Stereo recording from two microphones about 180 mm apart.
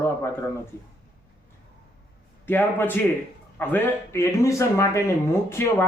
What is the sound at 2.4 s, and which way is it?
Speech, 10° left (ahead or behind).